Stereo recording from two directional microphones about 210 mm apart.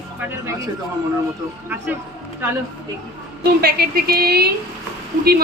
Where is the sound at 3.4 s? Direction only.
45° right (ahead or behind).